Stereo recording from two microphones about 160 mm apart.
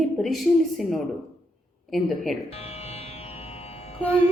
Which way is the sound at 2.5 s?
40° left (ahead or behind).